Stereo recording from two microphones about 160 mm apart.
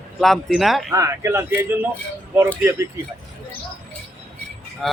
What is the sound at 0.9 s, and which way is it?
Speech, 20° right (ahead or behind).